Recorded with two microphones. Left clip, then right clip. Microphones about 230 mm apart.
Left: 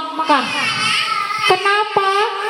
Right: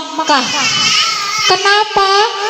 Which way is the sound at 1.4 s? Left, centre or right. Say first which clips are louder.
Right 4 dB; right.